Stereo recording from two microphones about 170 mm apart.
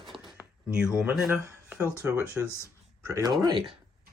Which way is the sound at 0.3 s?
5° right (ahead or behind).